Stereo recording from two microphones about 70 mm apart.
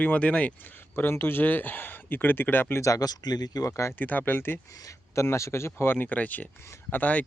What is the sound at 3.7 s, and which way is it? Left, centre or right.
Speech, left.